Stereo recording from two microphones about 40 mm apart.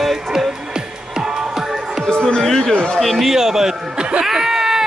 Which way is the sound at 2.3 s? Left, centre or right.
Centre.